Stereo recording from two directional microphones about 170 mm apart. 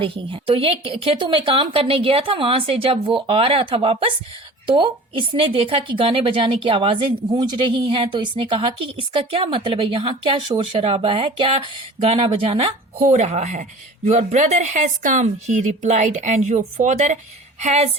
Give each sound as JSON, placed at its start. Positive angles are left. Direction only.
{"t": 0.0, "sound": "a woman's voice", "side_deg": -30}
{"t": 13.0, "sound": "a woman's voice", "side_deg": -45}